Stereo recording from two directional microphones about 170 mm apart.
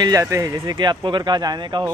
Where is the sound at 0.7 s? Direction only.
30° right (ahead or behind).